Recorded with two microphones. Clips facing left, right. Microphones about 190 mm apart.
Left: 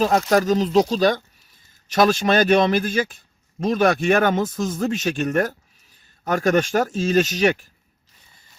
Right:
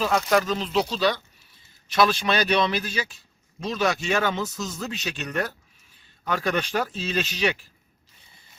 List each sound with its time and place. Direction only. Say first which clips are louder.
0.0 s speech: left 4 dB; 45° left (ahead or behind)